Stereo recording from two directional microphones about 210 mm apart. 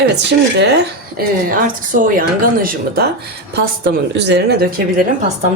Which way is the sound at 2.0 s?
40° right (ahead or behind).